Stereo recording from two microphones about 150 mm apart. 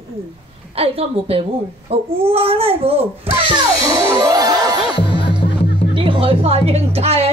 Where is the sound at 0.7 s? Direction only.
40° right (ahead or behind).